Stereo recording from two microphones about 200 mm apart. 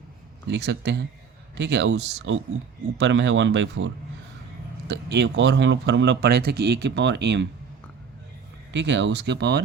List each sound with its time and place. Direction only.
0.4 s speech: 60° right (ahead or behind)
8.7 s speech: 65° right (ahead or behind)